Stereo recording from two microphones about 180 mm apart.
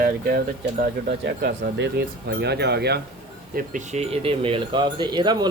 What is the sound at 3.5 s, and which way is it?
Speech, 45° right (ahead or behind).